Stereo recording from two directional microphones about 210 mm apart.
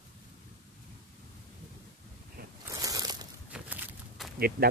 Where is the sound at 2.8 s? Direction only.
20° right (ahead or behind).